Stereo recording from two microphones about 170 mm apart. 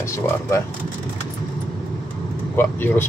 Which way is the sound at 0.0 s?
15° left (ahead or behind).